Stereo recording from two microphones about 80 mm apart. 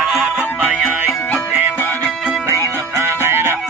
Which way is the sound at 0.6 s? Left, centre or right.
Right.